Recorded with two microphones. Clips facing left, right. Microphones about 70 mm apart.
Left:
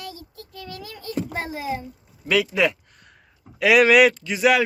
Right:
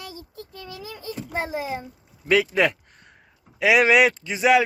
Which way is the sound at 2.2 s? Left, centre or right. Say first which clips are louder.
Right 1 dB; right.